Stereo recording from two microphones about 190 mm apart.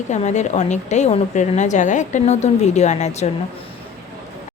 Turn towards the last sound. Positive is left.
turn(degrees=35)  # may be behind; listen again after turning